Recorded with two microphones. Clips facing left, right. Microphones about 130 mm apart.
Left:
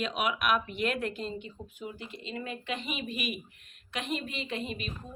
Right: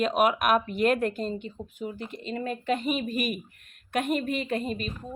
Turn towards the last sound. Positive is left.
turn(degrees=-45)  # may be behind; listen again after turning